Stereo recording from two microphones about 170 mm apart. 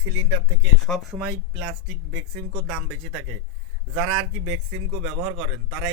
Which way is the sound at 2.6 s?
5° right (ahead or behind).